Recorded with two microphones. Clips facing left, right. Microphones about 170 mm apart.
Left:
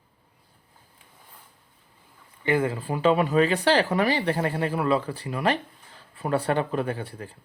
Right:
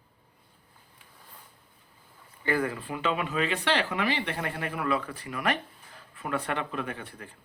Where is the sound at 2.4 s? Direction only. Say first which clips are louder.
Left 4 dB; 25° left (ahead or behind).